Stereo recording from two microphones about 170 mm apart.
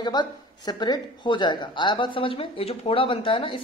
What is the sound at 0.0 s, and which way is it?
Speech, 25° left (ahead or behind).